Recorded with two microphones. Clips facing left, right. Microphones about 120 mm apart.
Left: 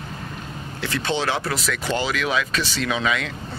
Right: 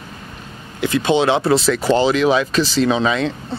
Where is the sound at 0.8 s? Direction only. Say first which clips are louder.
Right 9 dB; 15° right (ahead or behind).